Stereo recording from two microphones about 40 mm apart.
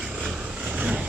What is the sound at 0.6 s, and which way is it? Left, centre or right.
Vehicle, right.